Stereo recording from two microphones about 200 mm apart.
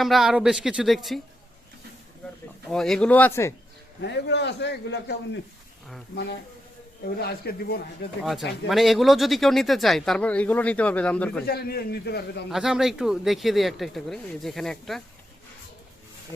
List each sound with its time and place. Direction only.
0.0 s speech: centre (ahead or behind)
2.6 s speech: centre (ahead or behind)
4.0 s a man's voice: 60° left (ahead or behind)
7.2 s a man's voice: 50° left (ahead or behind)
8.2 s speech: centre (ahead or behind)
11.4 s a man's voice: 50° left (ahead or behind)
12.5 s speech: centre (ahead or behind)